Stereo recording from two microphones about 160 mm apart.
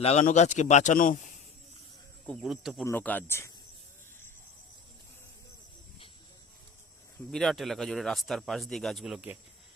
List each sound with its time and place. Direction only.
0.0 s speech: 40° left (ahead or behind)
2.2 s speech: centre (ahead or behind)
2.8 s speech: 10° left (ahead or behind)
7.3 s speech: centre (ahead or behind)